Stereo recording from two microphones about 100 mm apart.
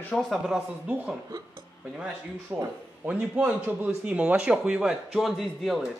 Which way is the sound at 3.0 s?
15° right (ahead or behind).